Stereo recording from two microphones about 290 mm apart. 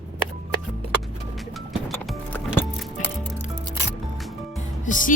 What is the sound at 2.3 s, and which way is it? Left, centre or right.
Music, centre.